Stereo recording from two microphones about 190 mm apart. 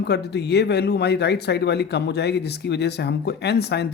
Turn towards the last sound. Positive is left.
turn(degrees=60)  # may be behind; listen again after turning